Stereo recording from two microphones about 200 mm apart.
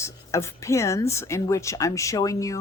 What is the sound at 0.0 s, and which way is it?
Speech, 15° left (ahead or behind).